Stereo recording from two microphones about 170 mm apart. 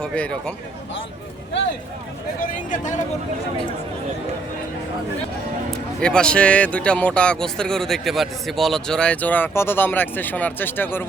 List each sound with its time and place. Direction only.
0.0 s speech: 5° left (ahead or behind)
2.5 s a man's voice: 45° left (ahead or behind)
6.0 s speech: 5° left (ahead or behind)